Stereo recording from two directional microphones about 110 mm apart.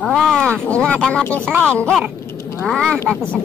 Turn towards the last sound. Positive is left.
turn(degrees=10)  # may be behind; listen again after turning